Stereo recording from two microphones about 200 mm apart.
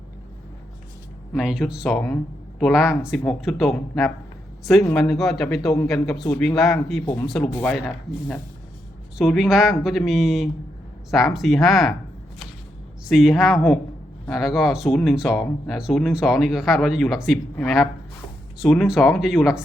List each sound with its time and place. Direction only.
1.3 s speech: 5° right (ahead or behind)
13.1 s speech: 5° right (ahead or behind)
18.6 s speech: centre (ahead or behind)